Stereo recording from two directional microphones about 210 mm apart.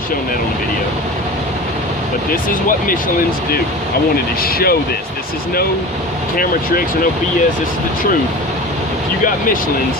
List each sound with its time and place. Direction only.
2.3 s speech: 40° left (ahead or behind)
4.4 s speech: 45° left (ahead or behind)
6.3 s speech: 45° left (ahead or behind)